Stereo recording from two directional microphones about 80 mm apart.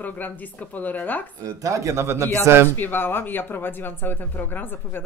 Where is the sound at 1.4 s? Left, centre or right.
Right.